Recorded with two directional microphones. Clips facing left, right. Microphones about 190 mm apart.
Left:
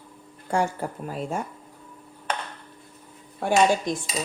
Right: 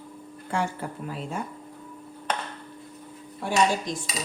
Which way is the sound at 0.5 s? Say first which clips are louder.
Left 4 dB; 45° left (ahead or behind).